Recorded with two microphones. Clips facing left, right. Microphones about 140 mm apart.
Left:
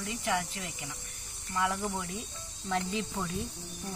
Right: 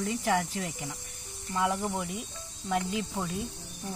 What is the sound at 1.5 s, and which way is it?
Speech, 20° right (ahead or behind).